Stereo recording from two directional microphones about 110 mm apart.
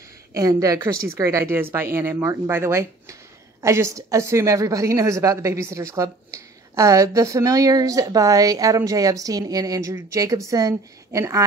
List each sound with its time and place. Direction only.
0.3 s a woman's voice: 30° right (ahead or behind)